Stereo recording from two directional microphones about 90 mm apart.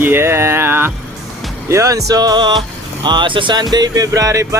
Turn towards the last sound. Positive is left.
turn(degrees=-35)  # may be behind; listen again after turning